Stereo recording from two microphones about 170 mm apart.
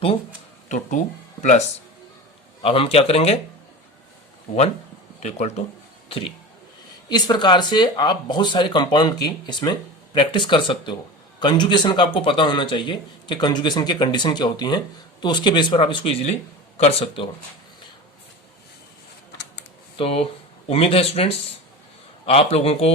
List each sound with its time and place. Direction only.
0.7 s speech: 45° left (ahead or behind)
2.6 s speech: 35° left (ahead or behind)
4.5 s a man's voice: 40° left (ahead or behind)
20.0 s speech: 35° left (ahead or behind)